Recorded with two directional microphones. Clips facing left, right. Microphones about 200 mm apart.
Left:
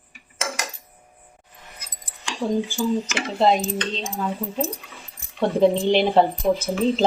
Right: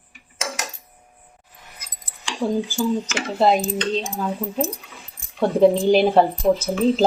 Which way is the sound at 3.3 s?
5° right (ahead or behind).